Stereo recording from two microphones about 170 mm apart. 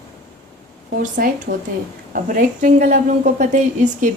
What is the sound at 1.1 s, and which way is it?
A woman's voice, 55° right (ahead or behind).